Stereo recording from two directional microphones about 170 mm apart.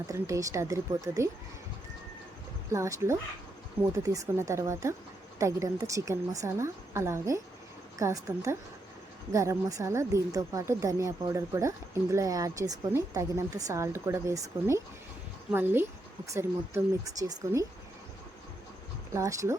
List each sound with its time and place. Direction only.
0.1 s a woman's voice: 20° right (ahead or behind)
2.7 s a woman's voice: 20° right (ahead or behind)
19.1 s speech: 20° right (ahead or behind)